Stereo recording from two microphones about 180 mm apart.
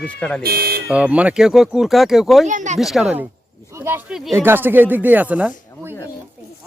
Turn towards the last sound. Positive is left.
turn(degrees=-10)  # may be behind; listen again after turning